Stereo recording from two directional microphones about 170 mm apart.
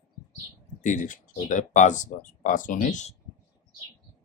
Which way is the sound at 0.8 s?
45° left (ahead or behind).